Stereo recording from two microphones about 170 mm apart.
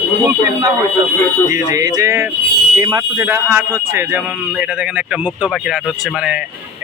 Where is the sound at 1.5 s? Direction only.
20° right (ahead or behind); by 6.4 s 5° right (ahead or behind).